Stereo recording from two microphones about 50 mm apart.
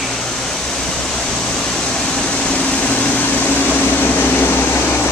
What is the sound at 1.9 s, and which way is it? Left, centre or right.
Air conditioning, centre.